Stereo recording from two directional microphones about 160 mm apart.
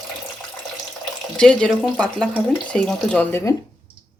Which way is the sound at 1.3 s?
5° left (ahead or behind).